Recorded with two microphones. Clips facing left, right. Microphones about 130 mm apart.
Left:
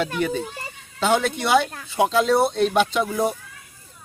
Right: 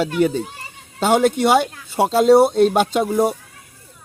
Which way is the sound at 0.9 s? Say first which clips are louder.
Right 5 dB; 45° right (ahead or behind).